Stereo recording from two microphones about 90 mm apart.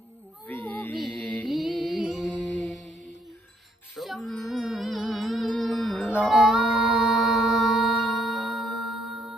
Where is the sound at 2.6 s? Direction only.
Centre (ahead or behind).